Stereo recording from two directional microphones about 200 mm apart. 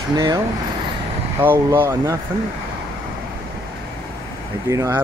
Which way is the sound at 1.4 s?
10° right (ahead or behind).